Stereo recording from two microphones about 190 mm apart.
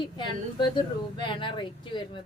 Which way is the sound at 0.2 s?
25° left (ahead or behind).